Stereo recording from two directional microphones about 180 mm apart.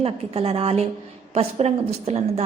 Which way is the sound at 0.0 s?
35° right (ahead or behind).